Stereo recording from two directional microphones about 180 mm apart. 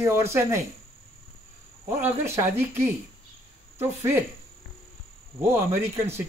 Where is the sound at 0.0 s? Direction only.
15° right (ahead or behind).